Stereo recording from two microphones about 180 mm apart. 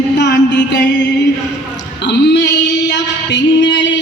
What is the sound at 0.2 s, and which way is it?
Music, 80° left.